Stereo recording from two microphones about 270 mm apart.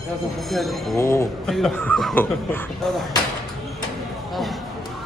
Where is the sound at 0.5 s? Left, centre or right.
Centre.